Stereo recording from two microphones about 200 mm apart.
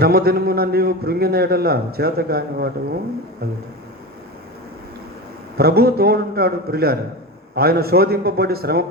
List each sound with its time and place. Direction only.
0.0 s a man's voice: 50° right (ahead or behind)
5.5 s a man's voice: 50° right (ahead or behind)